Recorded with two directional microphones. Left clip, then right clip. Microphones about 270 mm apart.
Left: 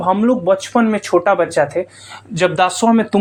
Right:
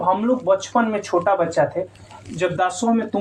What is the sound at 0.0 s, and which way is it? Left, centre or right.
Speech, left.